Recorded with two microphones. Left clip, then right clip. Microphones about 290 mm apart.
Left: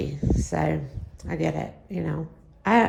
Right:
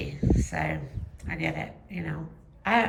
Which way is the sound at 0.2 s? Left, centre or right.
Centre.